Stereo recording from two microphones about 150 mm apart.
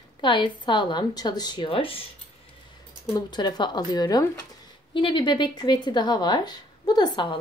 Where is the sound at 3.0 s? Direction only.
25° left (ahead or behind).